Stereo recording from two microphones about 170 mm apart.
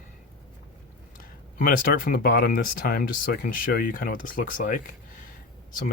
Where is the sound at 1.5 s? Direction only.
60° left (ahead or behind).